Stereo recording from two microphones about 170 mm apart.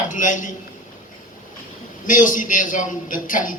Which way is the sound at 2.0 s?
50° left (ahead or behind).